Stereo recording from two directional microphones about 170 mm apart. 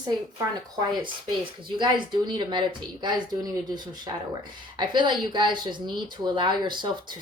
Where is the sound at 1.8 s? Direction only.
30° right (ahead or behind).